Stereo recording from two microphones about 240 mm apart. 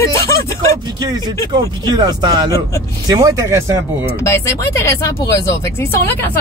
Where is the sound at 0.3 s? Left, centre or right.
Centre.